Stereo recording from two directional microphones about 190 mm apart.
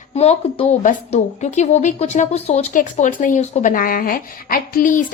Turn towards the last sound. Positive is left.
turn(degrees=45)  # may be behind; listen again after turning